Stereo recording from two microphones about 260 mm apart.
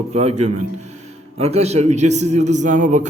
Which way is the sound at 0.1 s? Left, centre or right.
Right.